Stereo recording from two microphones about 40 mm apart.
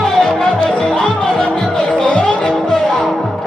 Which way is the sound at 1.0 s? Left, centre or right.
Left.